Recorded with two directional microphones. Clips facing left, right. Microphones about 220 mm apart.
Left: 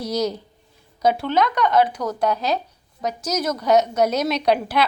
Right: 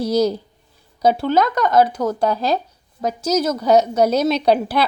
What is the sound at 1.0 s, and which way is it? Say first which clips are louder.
Speech: right 3 dB; 45° right (ahead or behind).